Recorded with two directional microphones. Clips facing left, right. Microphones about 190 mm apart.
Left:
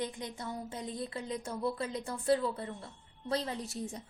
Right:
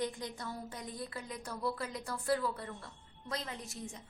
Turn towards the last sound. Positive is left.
turn(degrees=30)  # may be behind; listen again after turning